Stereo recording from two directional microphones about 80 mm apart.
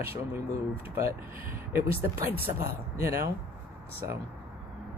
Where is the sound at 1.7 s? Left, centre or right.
Right.